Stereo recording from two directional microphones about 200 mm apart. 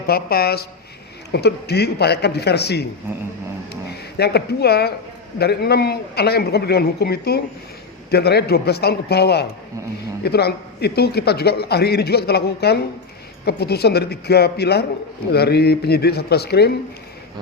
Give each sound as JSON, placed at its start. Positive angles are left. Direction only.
{"t": 0.1, "sound": "a man's voice", "side_deg": 50}
{"t": 4.2, "sound": "a man's voice", "side_deg": 55}